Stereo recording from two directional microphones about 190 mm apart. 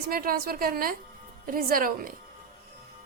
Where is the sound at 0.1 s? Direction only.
50° right (ahead or behind).